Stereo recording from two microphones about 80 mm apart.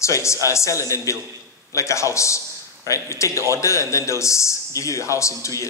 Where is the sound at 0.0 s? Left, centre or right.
Left.